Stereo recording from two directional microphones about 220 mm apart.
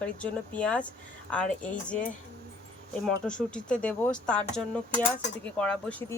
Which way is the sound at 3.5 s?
5° left (ahead or behind).